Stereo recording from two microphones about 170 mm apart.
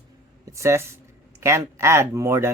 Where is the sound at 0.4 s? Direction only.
15° right (ahead or behind).